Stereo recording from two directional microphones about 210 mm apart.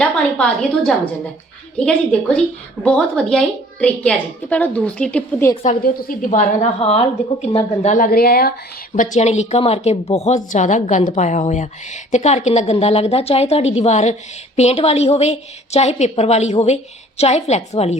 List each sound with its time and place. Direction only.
0.0 s a woman's voice: 5° left (ahead or behind)
5.6 s a woman's voice: 40° left (ahead or behind)
9.0 s a woman's voice: 35° left (ahead or behind)